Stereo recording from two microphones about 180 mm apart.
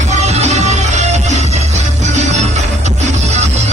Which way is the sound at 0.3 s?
40° right (ahead or behind).